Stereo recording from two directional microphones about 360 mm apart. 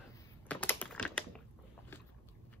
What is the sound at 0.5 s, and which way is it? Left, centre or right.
Typing, centre.